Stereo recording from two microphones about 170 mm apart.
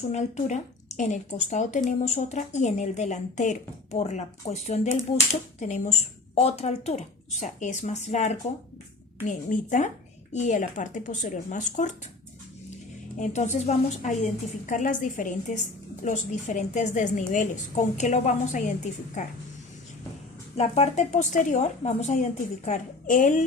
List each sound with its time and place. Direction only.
0.1 s a woman's voice: 45° left (ahead or behind)
13.1 s a woman's voice: 45° left (ahead or behind)
20.6 s a woman's voice: 40° left (ahead or behind)